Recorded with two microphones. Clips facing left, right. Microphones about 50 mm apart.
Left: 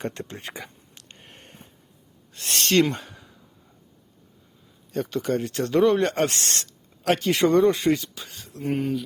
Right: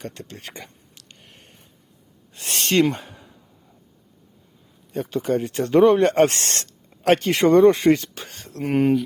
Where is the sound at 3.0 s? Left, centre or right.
Centre.